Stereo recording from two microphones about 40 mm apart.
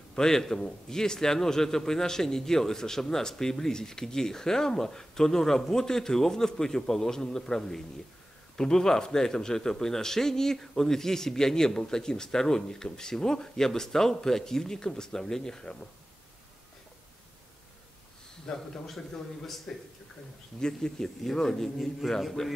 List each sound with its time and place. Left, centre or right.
0.1 s speech: centre
18.9 s a man's voice: centre
20.6 s speech: centre